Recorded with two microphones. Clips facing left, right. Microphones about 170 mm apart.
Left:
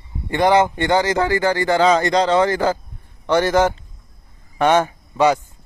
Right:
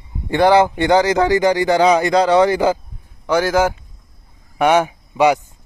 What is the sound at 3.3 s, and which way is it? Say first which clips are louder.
Speech: even; centre (ahead or behind).